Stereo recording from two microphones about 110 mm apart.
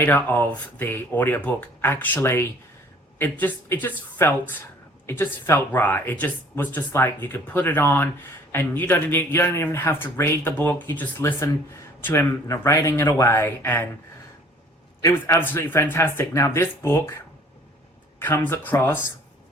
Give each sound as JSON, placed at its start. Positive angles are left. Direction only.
{"t": 0.0, "sound": "speech", "side_deg": 20}
{"t": 15.0, "sound": "speech", "side_deg": 25}